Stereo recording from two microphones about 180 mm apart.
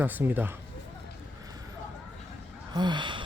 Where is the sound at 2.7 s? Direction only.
25° right (ahead or behind).